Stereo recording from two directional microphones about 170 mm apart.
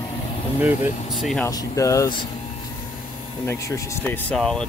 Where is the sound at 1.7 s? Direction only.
20° left (ahead or behind).